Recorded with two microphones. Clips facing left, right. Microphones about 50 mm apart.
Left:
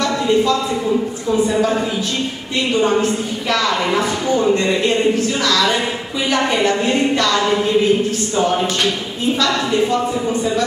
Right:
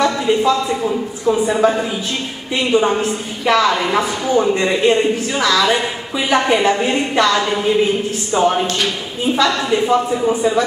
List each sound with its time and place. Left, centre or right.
0.0 s a woman's voice: centre